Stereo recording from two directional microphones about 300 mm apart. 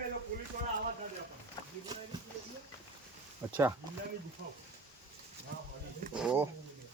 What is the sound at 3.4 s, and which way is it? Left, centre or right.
Speech, centre.